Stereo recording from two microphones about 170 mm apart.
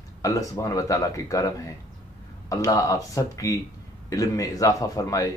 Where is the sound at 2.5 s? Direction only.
20° left (ahead or behind).